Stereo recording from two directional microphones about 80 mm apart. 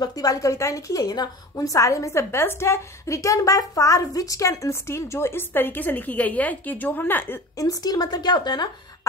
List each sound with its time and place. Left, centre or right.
0.0 s a woman's voice: left
7.5 s a woman's voice: left